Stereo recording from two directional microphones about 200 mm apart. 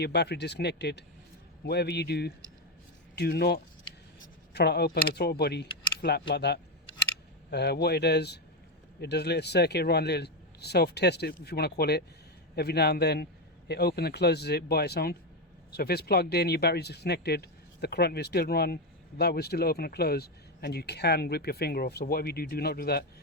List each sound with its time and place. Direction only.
0.0 s speech: 55° left (ahead or behind)